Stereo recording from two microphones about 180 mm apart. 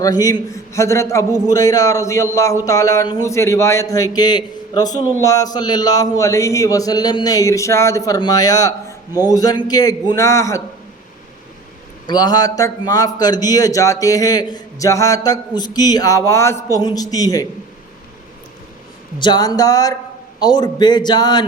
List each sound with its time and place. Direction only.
0.0 s a man's voice: 20° left (ahead or behind)
12.0 s a man's voice: 20° left (ahead or behind)
19.2 s a man's voice: 20° left (ahead or behind)